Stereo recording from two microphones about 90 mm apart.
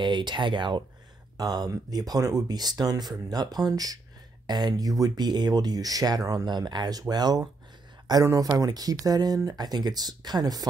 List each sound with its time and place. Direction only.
0.0 s speech: 60° right (ahead or behind)
1.3 s speech: 45° right (ahead or behind)